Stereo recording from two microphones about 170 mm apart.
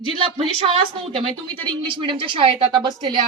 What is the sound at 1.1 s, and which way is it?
A woman's voice, 30° right (ahead or behind).